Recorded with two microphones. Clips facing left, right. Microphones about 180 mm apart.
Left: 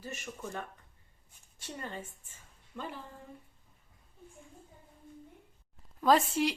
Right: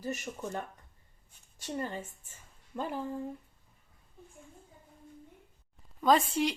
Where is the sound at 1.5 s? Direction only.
40° right (ahead or behind).